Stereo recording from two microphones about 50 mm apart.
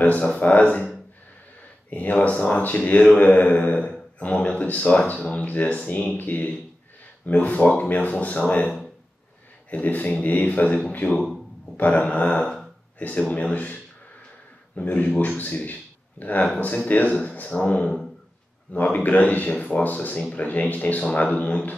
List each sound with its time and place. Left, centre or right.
0.4 s speech: left
1.9 s speech: left
14.8 s speech: left